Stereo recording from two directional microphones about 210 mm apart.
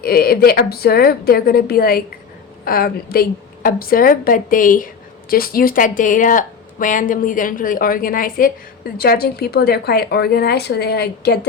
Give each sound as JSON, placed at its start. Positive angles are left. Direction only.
{"t": 0.0, "sound": "a woman's voice", "side_deg": 45}